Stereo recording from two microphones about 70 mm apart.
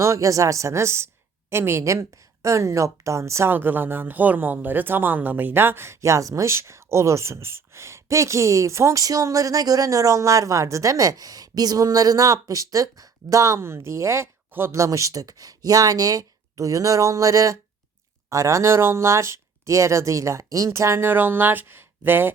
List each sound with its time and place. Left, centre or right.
0.0 s a woman's voice: right
3.5 s speech: right
20.7 s speech: right